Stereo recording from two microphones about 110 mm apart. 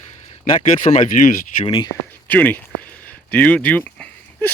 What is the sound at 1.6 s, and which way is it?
Speech, 45° left (ahead or behind).